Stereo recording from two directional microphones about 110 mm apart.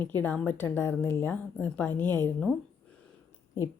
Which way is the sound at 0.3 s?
20° left (ahead or behind).